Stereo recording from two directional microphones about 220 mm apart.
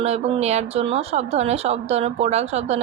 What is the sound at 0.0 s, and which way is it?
Speech, 30° right (ahead or behind).